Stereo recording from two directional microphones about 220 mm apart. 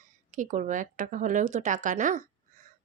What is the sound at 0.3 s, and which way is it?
A woman's voice, 35° right (ahead or behind).